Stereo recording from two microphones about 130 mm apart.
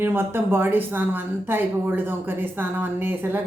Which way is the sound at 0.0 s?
15° right (ahead or behind).